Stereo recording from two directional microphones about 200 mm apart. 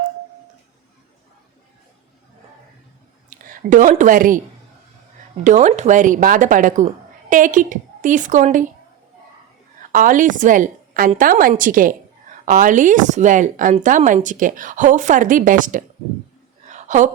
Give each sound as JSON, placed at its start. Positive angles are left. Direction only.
{"t": 3.2, "sound": "a woman's voice", "side_deg": -40}
{"t": 5.4, "sound": "a woman's voice", "side_deg": -35}
{"t": 9.8, "sound": "a woman's voice", "side_deg": -40}
{"t": 16.6, "sound": "a sound", "side_deg": -35}